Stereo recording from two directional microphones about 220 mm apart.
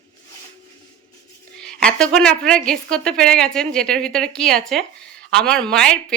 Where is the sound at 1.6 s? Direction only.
5° left (ahead or behind).